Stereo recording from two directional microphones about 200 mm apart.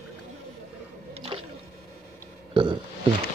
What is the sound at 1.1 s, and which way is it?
Rowboat, 30° right (ahead or behind).